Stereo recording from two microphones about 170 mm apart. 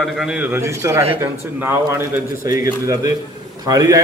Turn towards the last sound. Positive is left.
turn(degrees=-20)  # may be behind; listen again after turning